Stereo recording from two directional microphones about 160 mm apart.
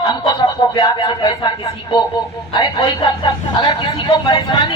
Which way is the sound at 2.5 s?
30° left (ahead or behind).